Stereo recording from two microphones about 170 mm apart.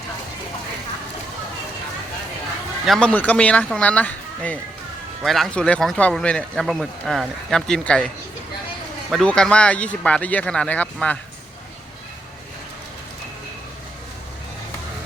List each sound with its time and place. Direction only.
2.8 s speech: 5° left (ahead or behind)
9.0 s speech: 5° left (ahead or behind)